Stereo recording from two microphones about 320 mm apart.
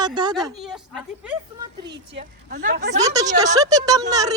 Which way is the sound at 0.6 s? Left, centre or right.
Centre.